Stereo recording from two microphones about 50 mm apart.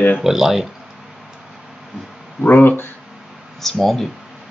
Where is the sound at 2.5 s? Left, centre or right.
Left.